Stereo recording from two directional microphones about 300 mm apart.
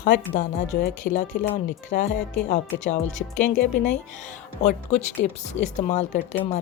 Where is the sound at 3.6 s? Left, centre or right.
Left.